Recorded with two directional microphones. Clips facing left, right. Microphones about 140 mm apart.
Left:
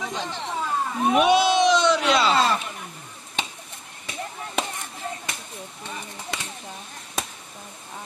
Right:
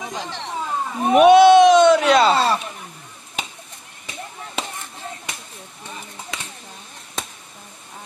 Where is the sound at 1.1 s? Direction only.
55° right (ahead or behind).